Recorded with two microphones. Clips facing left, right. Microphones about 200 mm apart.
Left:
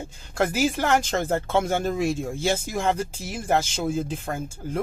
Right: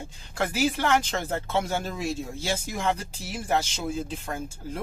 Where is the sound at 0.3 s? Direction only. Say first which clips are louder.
Left 3 dB; 45° left (ahead or behind).